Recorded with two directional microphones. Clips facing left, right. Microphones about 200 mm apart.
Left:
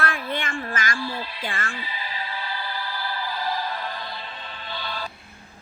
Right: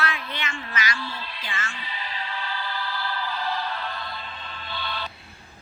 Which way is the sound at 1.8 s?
10° left (ahead or behind).